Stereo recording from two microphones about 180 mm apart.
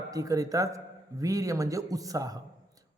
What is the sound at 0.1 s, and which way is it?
Speech, 20° right (ahead or behind).